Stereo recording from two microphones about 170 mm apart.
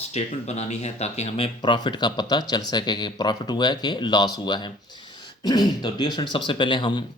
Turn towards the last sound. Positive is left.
turn(degrees=30)  # may be behind; listen again after turning